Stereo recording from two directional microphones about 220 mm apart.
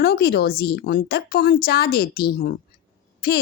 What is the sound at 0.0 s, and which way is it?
A woman's voice, 45° left (ahead or behind).